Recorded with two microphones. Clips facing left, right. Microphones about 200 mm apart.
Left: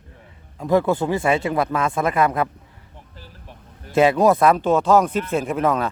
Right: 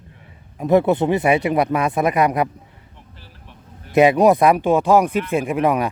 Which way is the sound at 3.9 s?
15° right (ahead or behind).